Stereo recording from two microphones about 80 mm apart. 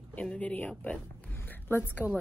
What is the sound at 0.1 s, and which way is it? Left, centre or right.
Speech, centre.